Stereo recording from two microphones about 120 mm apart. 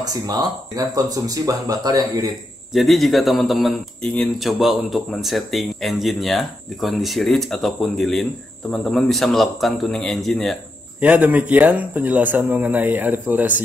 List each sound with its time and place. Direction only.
0.0 s speech: 35° right (ahead or behind)
2.7 s speech: centre (ahead or behind)
11.0 s speech: 10° right (ahead or behind)